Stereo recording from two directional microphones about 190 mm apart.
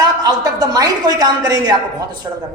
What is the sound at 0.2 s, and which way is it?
A woman's voice, 20° right (ahead or behind).